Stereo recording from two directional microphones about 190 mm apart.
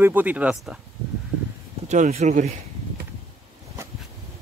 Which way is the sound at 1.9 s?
35° right (ahead or behind).